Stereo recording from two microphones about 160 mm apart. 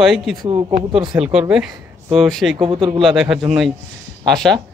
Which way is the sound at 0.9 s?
5° right (ahead or behind).